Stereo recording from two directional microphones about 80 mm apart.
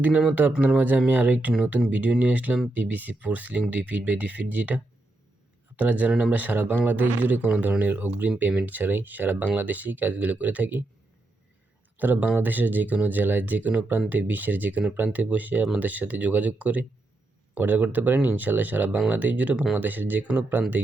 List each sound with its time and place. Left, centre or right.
0.0 s speech: centre
11.9 s speech: right